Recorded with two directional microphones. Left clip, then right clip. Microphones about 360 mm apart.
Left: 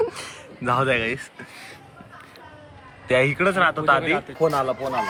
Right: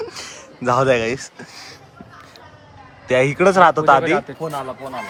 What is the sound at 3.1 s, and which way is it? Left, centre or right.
A man's voice, centre.